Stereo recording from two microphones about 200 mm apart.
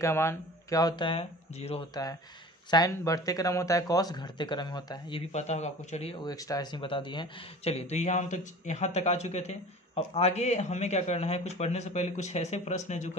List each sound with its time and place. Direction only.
0.0 s speech: 15° left (ahead or behind); by 1.9 s 30° left (ahead or behind)
2.7 s speech: 15° left (ahead or behind)
5.3 s speech: 35° left (ahead or behind)